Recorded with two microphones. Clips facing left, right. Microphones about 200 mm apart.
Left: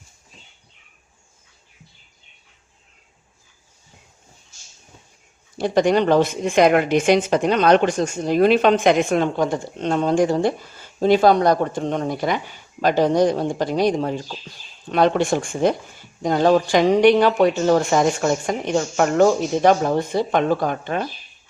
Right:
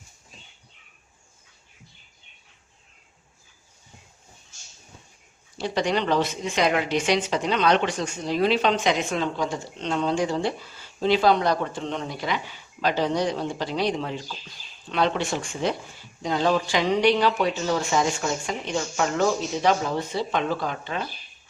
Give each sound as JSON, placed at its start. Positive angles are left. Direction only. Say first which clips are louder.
{"t": 5.5, "sound": "speech", "louder": "left 8 dB", "side_deg": 50}